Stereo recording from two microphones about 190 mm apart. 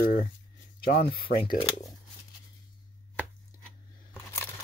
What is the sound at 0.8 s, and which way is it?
Speech, 55° left (ahead or behind).